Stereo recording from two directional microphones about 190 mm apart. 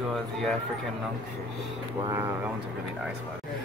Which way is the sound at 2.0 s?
15° right (ahead or behind).